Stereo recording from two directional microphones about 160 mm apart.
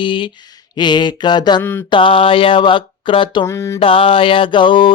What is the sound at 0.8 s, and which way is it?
Mantra, 30° left (ahead or behind).